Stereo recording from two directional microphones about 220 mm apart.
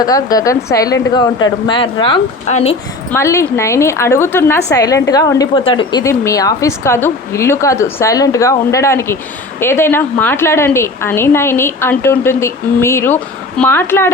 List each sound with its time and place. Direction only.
0.0 s speech: 15° left (ahead or behind)
3.1 s a woman's voice: 10° left (ahead or behind)